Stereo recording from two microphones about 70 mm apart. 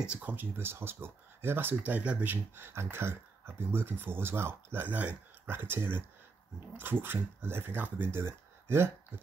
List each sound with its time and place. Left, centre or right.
0.0 s speech: centre
8.2 s speech: right